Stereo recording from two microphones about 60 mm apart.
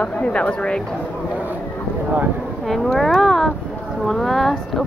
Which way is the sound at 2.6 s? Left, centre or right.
Centre.